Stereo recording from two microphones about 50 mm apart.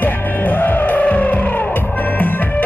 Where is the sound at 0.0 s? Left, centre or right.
Left.